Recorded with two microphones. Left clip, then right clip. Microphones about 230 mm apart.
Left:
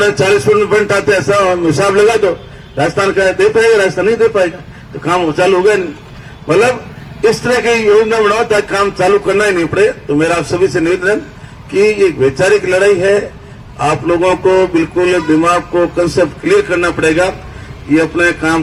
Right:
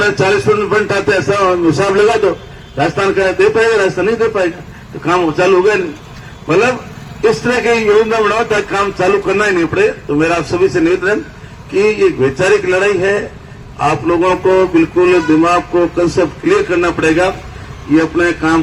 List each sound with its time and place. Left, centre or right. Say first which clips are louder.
0.0 s a man's voice: left 2 dB; left